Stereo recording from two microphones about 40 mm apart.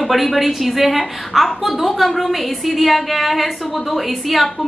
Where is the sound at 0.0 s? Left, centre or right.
Centre.